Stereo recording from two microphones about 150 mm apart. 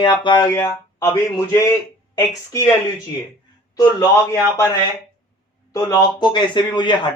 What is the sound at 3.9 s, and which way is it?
Speech, 20° left (ahead or behind).